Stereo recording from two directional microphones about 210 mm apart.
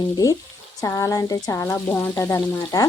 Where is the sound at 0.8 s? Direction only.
15° left (ahead or behind).